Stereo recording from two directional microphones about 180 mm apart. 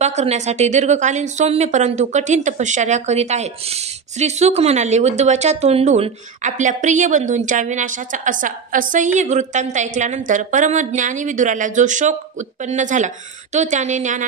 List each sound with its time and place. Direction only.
0.0 s a woman's voice: 40° right (ahead or behind)